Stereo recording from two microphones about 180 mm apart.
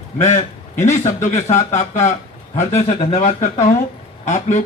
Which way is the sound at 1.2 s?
40° left (ahead or behind).